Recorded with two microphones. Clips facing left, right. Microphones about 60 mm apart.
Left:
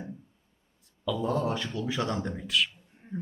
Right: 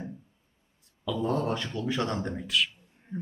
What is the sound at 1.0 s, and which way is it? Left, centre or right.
Speech, centre.